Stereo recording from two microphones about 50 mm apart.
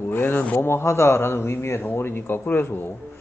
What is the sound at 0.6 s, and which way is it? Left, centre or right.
A man's voice, left.